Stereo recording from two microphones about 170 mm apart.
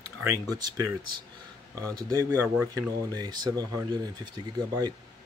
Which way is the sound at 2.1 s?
15° right (ahead or behind).